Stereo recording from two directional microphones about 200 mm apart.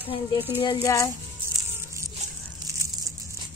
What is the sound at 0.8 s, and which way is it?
Speech, 15° left (ahead or behind).